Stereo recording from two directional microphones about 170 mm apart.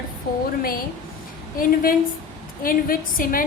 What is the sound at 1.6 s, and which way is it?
A woman's voice, 60° left (ahead or behind).